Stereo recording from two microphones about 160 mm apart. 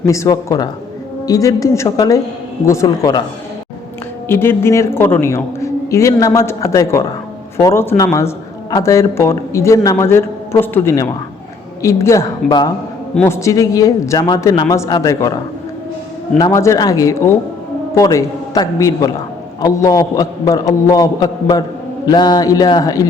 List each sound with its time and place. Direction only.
0.0 s a man's voice: 20° left (ahead or behind)
4.3 s a man's voice: 15° left (ahead or behind)
16.4 s a man's voice: 20° left (ahead or behind)